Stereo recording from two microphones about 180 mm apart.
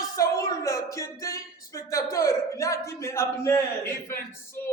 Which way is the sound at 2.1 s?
20° left (ahead or behind).